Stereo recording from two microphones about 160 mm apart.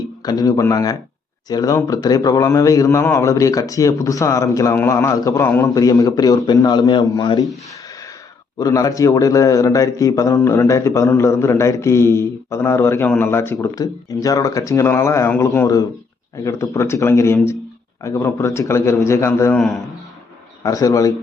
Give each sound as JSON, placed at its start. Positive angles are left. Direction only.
{"t": 0.3, "sound": "a man's voice", "side_deg": 20}
{"t": 8.5, "sound": "a man's voice", "side_deg": 25}
{"t": 19.5, "sound": "a man's voice", "side_deg": 0}
{"t": 20.7, "sound": "a man's voice", "side_deg": 20}